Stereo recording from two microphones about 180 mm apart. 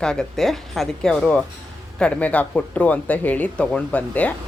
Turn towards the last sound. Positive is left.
turn(degrees=10)  # may be behind; listen again after turning